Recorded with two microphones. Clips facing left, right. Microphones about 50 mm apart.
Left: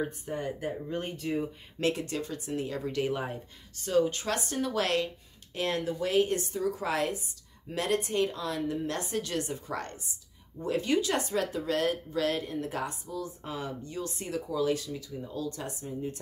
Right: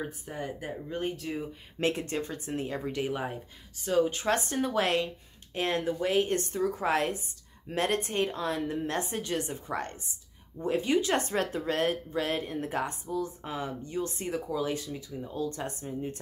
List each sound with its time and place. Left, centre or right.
0.0 s speech: centre
1.8 s speech: right
3.0 s speech: centre
4.2 s speech: right
6.3 s a woman's voice: right
6.8 s speech: right
10.6 s speech: right